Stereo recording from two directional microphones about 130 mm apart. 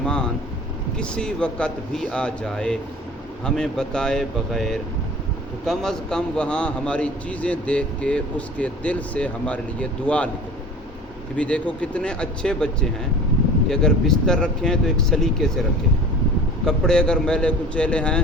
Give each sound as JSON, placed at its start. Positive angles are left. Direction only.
{"t": 0.0, "sound": "vehicle", "side_deg": 5}
{"t": 0.9, "sound": "a man's voice", "side_deg": 5}
{"t": 11.3, "sound": "a man's voice", "side_deg": 10}
{"t": 16.6, "sound": "a man's voice", "side_deg": 5}